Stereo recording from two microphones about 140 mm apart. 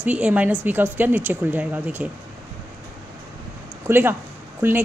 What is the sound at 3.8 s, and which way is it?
Speech, 15° right (ahead or behind).